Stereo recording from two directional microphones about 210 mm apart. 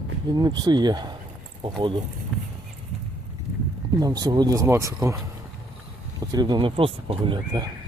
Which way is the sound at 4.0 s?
20° right (ahead or behind).